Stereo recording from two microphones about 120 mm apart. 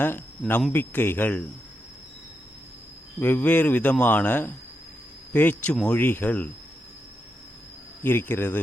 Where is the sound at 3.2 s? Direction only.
15° left (ahead or behind).